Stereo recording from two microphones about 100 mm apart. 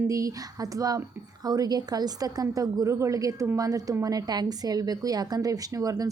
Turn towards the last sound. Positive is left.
turn(degrees=-35)  # may be behind; listen again after turning